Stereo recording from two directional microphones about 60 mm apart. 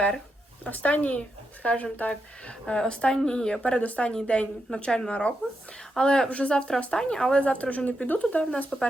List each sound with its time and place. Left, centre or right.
0.6 s speech: left